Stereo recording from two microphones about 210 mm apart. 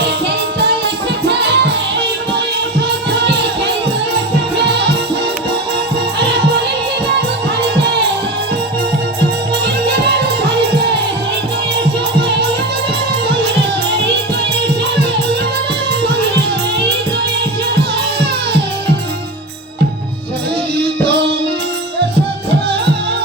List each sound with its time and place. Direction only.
1.3 s music: 55° right (ahead or behind)